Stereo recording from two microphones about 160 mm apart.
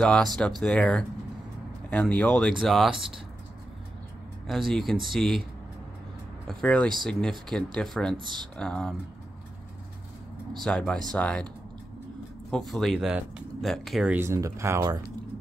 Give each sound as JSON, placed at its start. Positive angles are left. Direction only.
{"t": 0.0, "sound": "speech", "side_deg": 5}
{"t": 4.5, "sound": "speech", "side_deg": 0}
{"t": 6.4, "sound": "speech", "side_deg": 5}
{"t": 10.6, "sound": "speech", "side_deg": 5}
{"t": 12.4, "sound": "speech", "side_deg": 5}
{"t": 14.1, "sound": "speech", "side_deg": -15}